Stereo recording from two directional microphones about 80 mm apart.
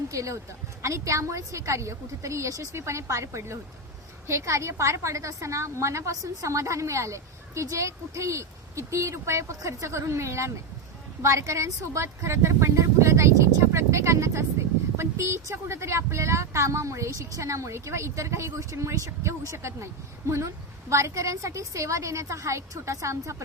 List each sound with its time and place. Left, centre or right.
0.1 s a woman's voice: right
20.9 s a woman's voice: right